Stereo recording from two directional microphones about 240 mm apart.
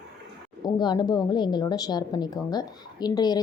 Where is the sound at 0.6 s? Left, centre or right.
Centre.